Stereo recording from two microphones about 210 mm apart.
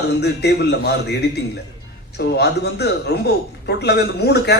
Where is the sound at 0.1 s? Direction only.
50° left (ahead or behind).